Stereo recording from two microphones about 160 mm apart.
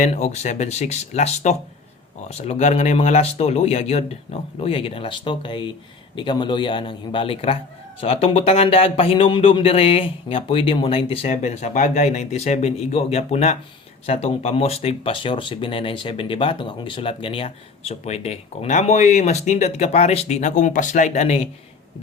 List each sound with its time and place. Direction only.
0.0 s a man's voice: 45° left (ahead or behind)